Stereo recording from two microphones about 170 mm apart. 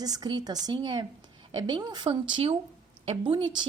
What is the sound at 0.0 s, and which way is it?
A woman's voice, 20° right (ahead or behind).